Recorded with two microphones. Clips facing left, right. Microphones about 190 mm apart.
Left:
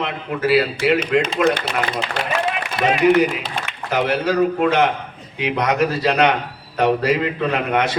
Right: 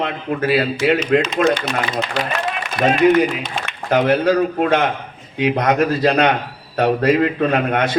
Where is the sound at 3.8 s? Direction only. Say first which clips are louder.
Right 5 dB; 55° right (ahead or behind).